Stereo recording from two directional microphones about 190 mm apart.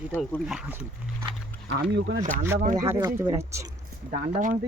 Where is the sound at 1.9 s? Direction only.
60° right (ahead or behind).